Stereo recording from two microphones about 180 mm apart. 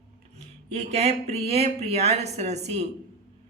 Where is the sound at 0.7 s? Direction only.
40° right (ahead or behind).